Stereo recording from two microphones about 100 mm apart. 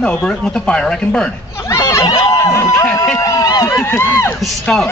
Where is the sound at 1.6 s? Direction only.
30° left (ahead or behind).